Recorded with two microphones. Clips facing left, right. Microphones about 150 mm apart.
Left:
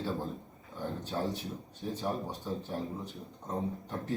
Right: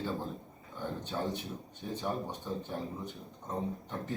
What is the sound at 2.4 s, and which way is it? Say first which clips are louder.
A man's voice: left 1 dB; centre (ahead or behind).